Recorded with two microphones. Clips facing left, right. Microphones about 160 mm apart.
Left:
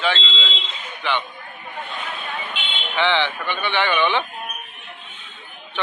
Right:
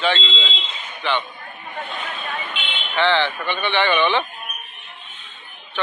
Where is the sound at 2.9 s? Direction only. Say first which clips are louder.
Right 2 dB; 15° left (ahead or behind).